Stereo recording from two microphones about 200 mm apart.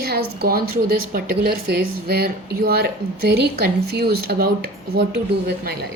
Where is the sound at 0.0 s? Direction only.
50° right (ahead or behind).